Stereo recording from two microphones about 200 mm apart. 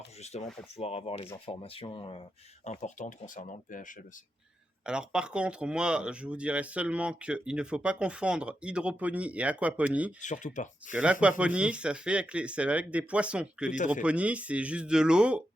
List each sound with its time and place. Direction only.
0.2 s speech: 30° left (ahead or behind)
4.8 s speech: 5° right (ahead or behind)
10.2 s speech: 40° left (ahead or behind)
10.9 s speech: 5° right (ahead or behind)